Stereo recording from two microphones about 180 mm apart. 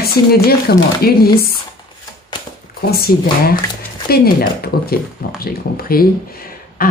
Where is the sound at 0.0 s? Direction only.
60° left (ahead or behind).